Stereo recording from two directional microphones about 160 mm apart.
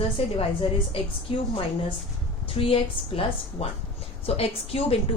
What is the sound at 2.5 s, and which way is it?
A woman's voice, 35° left (ahead or behind).